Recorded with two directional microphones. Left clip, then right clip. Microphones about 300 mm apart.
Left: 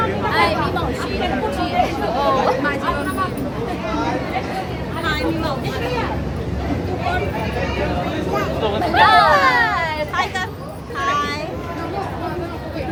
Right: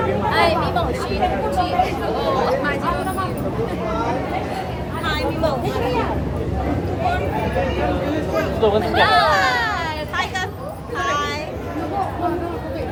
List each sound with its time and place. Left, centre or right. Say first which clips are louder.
0.3 s vehicle: even; centre
1.8 s a sound: left 2 dB; centre
8.8 s hubbub: left 7 dB; centre
11.0 s vehicle: left 2 dB; centre